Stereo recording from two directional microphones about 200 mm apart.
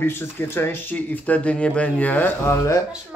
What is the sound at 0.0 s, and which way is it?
Speech, 10° left (ahead or behind).